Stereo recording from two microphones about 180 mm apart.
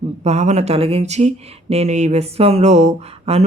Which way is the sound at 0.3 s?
40° right (ahead or behind).